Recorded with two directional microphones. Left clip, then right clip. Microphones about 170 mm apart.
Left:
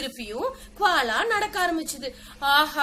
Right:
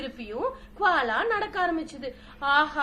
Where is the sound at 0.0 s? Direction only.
10° left (ahead or behind).